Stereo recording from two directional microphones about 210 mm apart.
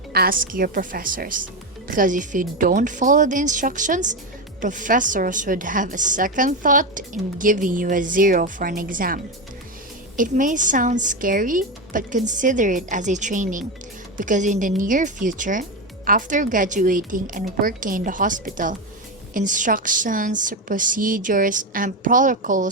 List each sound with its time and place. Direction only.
0.1 s a woman's voice: 45° right (ahead or behind)